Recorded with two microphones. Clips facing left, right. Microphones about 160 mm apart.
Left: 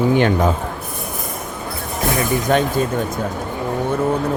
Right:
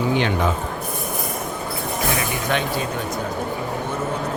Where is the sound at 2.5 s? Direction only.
40° left (ahead or behind).